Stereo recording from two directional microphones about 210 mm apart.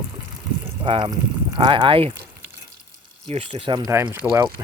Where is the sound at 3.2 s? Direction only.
30° right (ahead or behind).